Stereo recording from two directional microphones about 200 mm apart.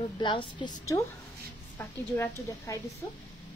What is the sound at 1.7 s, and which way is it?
A woman's voice, 10° left (ahead or behind).